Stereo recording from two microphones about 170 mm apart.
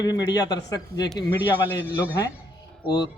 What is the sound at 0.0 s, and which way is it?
A man's voice, 25° left (ahead or behind).